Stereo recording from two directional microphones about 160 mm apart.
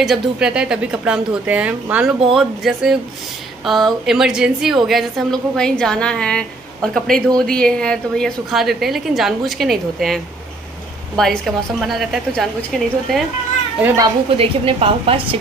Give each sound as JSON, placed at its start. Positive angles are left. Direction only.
{"t": 0.0, "sound": "a woman's voice", "side_deg": -5}
{"t": 14.3, "sound": "a woman's voice", "side_deg": -35}